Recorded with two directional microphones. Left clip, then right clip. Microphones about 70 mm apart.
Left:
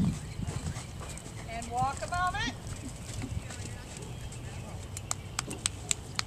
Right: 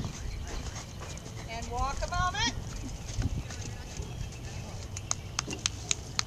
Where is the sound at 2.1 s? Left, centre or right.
Right.